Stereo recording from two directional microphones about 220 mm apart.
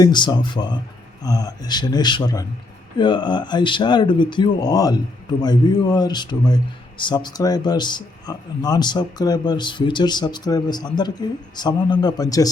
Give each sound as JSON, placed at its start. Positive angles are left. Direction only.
{"t": 0.0, "sound": "speech", "side_deg": 20}